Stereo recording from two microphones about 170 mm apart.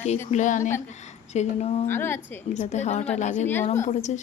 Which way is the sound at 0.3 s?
50° left (ahead or behind).